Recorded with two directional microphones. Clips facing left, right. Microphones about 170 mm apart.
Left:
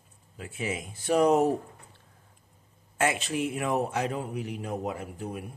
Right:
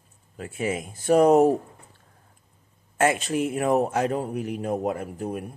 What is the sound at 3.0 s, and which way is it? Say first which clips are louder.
A man's voice: right 5 dB; 45° right (ahead or behind).